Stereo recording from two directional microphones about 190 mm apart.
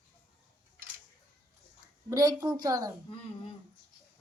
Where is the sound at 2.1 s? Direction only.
20° right (ahead or behind).